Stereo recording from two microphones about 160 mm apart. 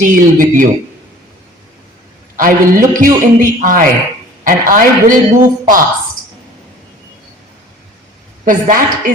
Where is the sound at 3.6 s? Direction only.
55° right (ahead or behind).